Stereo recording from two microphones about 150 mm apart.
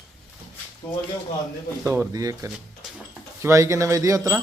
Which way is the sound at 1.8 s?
20° right (ahead or behind).